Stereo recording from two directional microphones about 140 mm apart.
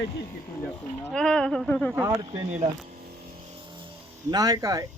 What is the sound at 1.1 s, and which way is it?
Speech, 5° left (ahead or behind).